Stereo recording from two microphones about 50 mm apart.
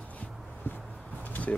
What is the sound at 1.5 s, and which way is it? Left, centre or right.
Speech, left.